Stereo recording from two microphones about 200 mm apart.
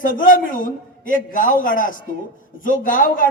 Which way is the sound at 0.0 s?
40° left (ahead or behind).